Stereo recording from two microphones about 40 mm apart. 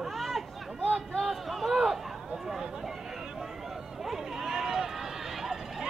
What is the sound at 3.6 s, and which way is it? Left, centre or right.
Run, centre.